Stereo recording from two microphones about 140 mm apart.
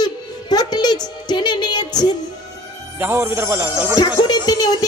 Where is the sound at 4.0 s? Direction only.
30° left (ahead or behind).